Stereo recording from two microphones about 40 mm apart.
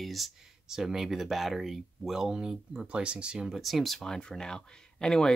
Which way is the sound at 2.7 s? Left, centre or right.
Right.